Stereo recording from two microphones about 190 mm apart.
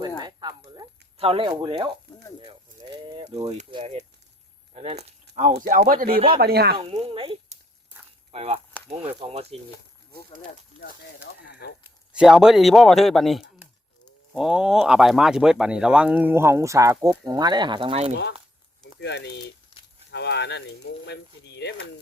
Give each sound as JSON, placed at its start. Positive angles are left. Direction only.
{"t": 0.2, "sound": "a sound", "side_deg": -20}
{"t": 2.4, "sound": "bird", "side_deg": -25}
{"t": 4.7, "sound": "speech", "side_deg": -35}
{"t": 6.1, "sound": "speech", "side_deg": -30}
{"t": 6.4, "sound": "speech", "side_deg": -55}
{"t": 6.7, "sound": "speech", "side_deg": -30}
{"t": 11.8, "sound": "speech", "side_deg": -5}
{"t": 18.9, "sound": "speech", "side_deg": 65}
{"t": 19.7, "sound": "livestock", "side_deg": 25}
{"t": 20.1, "sound": "speech", "side_deg": 65}